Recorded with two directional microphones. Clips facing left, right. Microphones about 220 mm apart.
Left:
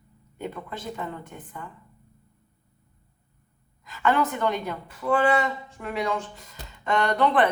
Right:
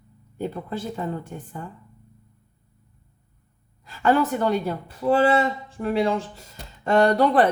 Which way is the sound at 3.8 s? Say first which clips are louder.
Right 4 dB; 35° right (ahead or behind).